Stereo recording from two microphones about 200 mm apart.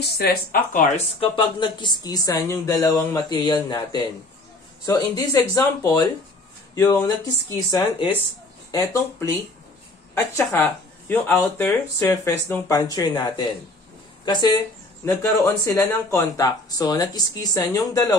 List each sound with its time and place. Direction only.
0.0 s speech: 50° left (ahead or behind)
0.9 s speech: 25° left (ahead or behind)
10.1 s speech: 15° left (ahead or behind)